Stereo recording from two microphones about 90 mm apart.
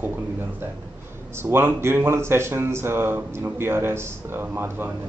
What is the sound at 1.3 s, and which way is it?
Speech, 25° right (ahead or behind).